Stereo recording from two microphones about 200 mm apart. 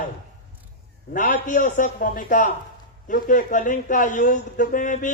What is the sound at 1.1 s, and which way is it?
A man's voice, 40° left (ahead or behind).